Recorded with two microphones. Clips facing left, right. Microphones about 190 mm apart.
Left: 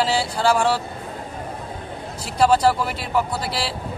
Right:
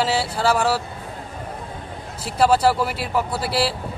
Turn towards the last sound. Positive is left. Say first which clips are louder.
# right 4 dB
turn(degrees=-5)  # may be behind; listen again after turning